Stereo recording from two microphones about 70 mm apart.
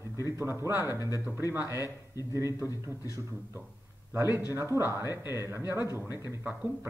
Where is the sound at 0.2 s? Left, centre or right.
Right.